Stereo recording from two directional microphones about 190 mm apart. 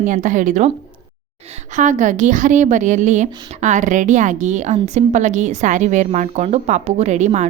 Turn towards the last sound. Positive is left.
turn(degrees=-35)  # may be behind; listen again after turning